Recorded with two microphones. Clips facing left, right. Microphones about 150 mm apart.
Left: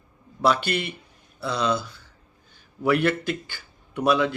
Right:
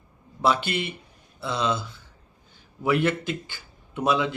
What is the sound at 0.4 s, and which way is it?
Speech, 20° right (ahead or behind).